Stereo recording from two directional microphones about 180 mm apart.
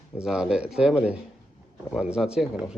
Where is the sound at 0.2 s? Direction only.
5° right (ahead or behind).